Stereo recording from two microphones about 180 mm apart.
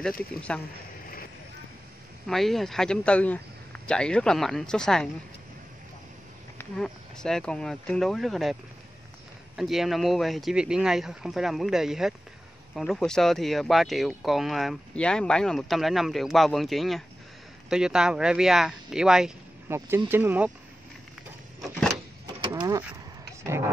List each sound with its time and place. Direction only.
0.2 s speech: 5° left (ahead or behind)
2.2 s speech: centre (ahead or behind)
6.6 s speech: 5° left (ahead or behind)
9.6 s speech: centre (ahead or behind)
21.5 s vehicle: centre (ahead or behind)
22.2 s a sound: 20° right (ahead or behind)